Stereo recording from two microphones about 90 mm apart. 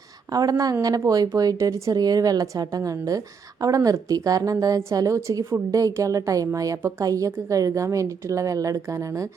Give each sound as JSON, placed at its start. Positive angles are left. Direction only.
{"t": 0.3, "sound": "a woman's voice", "side_deg": -45}